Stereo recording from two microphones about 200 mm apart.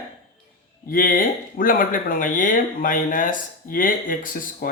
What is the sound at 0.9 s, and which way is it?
Speech, 45° left (ahead or behind).